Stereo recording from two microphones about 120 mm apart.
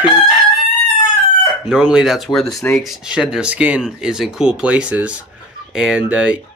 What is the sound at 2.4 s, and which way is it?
Speech, 20° left (ahead or behind).